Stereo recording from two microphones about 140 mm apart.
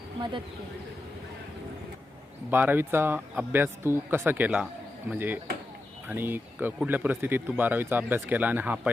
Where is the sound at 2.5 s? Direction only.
15° right (ahead or behind).